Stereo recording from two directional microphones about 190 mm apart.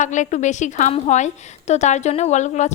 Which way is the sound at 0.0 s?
40° left (ahead or behind).